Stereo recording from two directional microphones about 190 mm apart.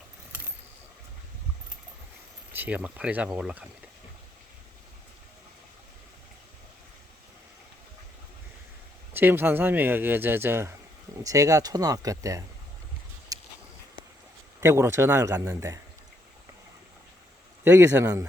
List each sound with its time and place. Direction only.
2.5 s speech: 10° right (ahead or behind)
9.1 s speech: 10° right (ahead or behind)
13.3 s a sound: 20° right (ahead or behind)
14.6 s speech: 15° right (ahead or behind)
17.6 s speech: 15° right (ahead or behind)